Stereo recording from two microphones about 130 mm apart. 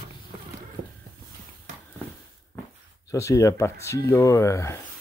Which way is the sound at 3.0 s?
25° left (ahead or behind).